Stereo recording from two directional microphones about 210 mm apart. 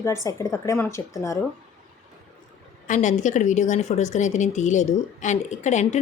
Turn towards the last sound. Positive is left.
turn(degrees=35)  # may be behind; listen again after turning